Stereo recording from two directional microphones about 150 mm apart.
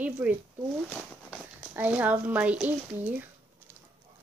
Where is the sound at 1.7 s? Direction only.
10° right (ahead or behind).